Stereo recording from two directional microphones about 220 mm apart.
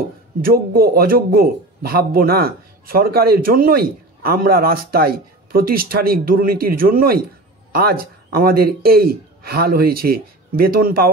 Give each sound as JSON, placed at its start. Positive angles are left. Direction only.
{"t": 0.4, "sound": "speech", "side_deg": -40}